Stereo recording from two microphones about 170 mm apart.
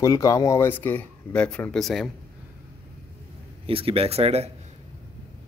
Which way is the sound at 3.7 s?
35° right (ahead or behind).